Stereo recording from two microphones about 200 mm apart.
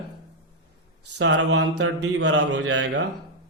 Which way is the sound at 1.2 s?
75° right (ahead or behind).